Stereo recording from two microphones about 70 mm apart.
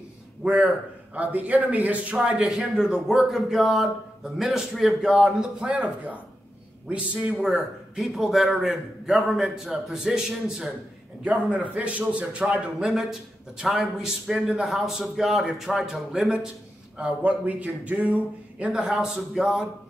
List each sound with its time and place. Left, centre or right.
0.4 s a man's voice: centre
2.4 s a man's voice: centre
7.5 s a man's voice: centre
11.2 s a man's voice: centre
17.0 s a man's voice: centre
18.8 s a man's voice: centre